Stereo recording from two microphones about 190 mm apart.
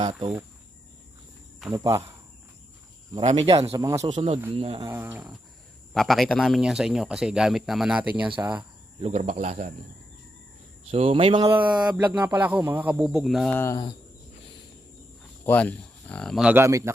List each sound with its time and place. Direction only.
0.0 s speech: 25° right (ahead or behind)
1.7 s speech: 20° right (ahead or behind)
3.1 s speech: 30° right (ahead or behind)
3.7 s speech: 15° right (ahead or behind)
4.0 s speech: 30° right (ahead or behind)
4.8 s speech: 15° right (ahead or behind)
9.0 s speech: 30° right (ahead or behind)
10.9 s speech: 30° right (ahead or behind)
12.2 s speech: 10° right (ahead or behind)
13.6 s speech: 15° left (ahead or behind)
15.4 s speech: 10° left (ahead or behind); by 16.9 s 15° right (ahead or behind)